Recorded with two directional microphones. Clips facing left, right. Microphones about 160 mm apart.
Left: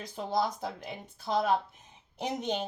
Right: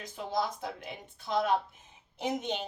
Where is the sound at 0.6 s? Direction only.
40° left (ahead or behind).